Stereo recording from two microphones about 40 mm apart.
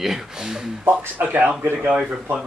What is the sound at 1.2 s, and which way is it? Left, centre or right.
Speech, right.